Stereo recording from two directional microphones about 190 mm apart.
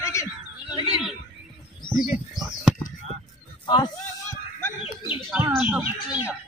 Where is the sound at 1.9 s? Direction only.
5° right (ahead or behind).